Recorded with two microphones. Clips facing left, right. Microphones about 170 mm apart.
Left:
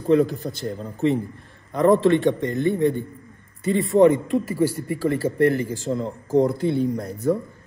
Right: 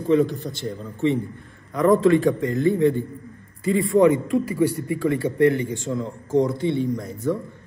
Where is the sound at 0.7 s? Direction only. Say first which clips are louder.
Even; 35° left (ahead or behind).